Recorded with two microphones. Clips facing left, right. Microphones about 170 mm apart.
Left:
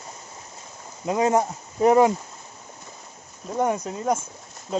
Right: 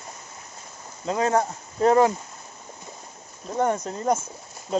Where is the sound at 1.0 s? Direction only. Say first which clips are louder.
Left 2 dB; 15° left (ahead or behind).